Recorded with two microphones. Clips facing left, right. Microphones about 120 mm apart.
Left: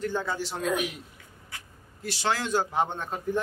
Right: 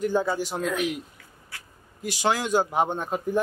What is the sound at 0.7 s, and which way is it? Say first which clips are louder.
Speech: even; 15° left (ahead or behind).